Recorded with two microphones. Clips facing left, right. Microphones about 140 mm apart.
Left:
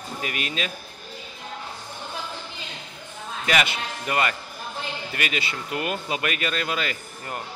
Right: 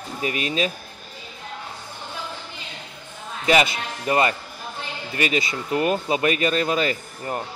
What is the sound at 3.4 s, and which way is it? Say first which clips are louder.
Speech: right 5 dB; 30° right (ahead or behind).